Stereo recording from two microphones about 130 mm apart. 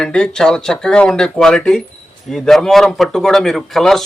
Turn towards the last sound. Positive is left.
turn(degrees=0)  # may be behind; listen again after turning